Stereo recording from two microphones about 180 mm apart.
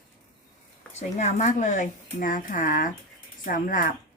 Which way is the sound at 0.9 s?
40° left (ahead or behind).